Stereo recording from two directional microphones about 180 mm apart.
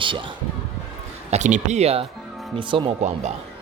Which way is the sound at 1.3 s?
40° right (ahead or behind).